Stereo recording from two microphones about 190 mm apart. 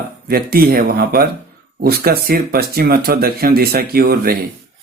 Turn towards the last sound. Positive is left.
turn(degrees=-50)  # may be behind; listen again after turning